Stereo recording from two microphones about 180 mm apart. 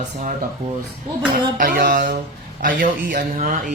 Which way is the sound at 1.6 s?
50° right (ahead or behind).